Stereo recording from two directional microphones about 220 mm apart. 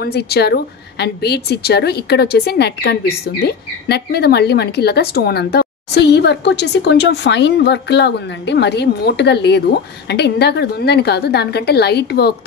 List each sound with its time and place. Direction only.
0.0 s a woman's voice: 45° left (ahead or behind)